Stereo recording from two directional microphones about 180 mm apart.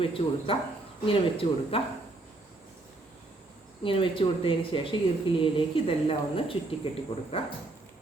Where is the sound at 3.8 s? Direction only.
30° left (ahead or behind).